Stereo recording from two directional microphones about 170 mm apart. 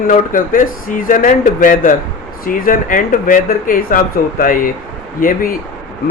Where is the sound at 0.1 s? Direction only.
50° left (ahead or behind).